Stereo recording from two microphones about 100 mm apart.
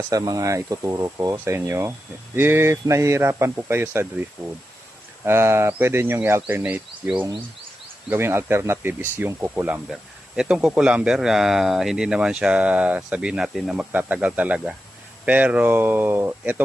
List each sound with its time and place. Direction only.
0.1 s speech: 35° right (ahead or behind)
5.2 s speech: 25° right (ahead or behind)
8.1 s speech: 25° right (ahead or behind)
9.9 s speech: 5° right (ahead or behind)
13.7 s speech: 15° right (ahead or behind)